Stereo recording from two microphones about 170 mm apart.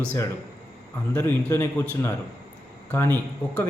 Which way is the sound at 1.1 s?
15° left (ahead or behind).